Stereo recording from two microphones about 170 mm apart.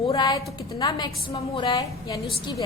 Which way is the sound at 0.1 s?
20° left (ahead or behind).